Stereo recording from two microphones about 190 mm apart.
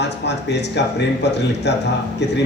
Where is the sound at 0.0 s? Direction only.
65° left (ahead or behind).